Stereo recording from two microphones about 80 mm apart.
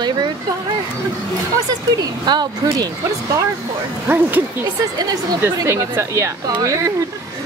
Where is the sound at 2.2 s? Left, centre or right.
Right.